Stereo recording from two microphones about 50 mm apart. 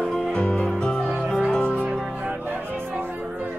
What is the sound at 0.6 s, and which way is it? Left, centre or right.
Music, centre.